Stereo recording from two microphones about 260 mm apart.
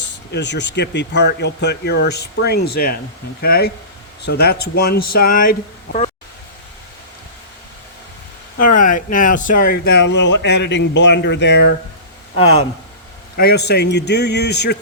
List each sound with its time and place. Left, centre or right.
0.3 s speech: left
8.5 s speech: left
13.3 s speech: left